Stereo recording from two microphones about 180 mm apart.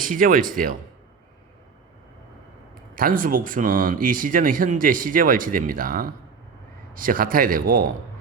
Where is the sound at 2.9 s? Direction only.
50° right (ahead or behind).